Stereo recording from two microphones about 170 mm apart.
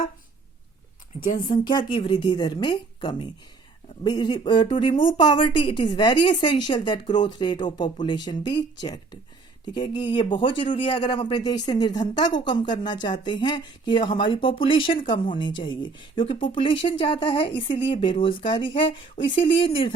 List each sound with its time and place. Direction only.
1.5 s a man's voice: 25° left (ahead or behind)